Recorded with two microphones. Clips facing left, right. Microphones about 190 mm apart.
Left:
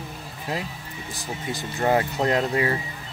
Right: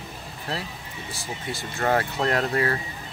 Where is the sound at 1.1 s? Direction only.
15° left (ahead or behind).